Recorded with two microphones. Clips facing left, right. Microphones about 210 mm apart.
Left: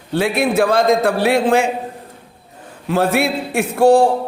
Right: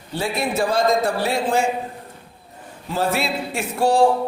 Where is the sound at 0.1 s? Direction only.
60° left (ahead or behind).